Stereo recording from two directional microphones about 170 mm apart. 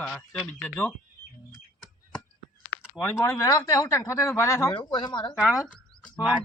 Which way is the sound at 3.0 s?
10° left (ahead or behind).